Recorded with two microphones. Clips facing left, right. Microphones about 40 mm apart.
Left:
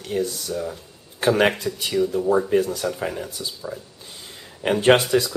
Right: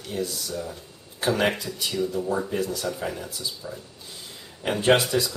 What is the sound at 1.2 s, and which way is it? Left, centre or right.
Speech, left.